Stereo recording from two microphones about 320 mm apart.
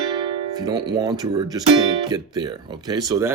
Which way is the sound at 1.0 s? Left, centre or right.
Centre.